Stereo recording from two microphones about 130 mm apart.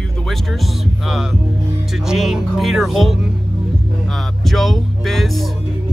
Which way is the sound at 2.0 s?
5° right (ahead or behind).